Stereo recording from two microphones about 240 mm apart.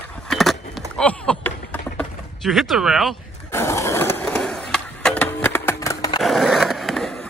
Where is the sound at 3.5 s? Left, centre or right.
Centre.